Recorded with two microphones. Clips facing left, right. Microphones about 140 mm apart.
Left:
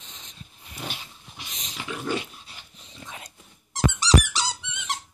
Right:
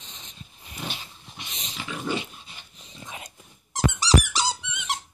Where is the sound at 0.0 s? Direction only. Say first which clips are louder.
Right 1 dB; 5° left (ahead or behind).